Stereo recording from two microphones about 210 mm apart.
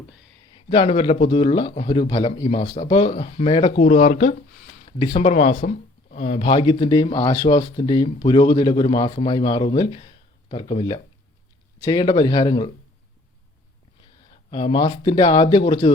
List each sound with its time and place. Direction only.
0.5 s speech: 25° left (ahead or behind)
14.0 s speech: 25° left (ahead or behind)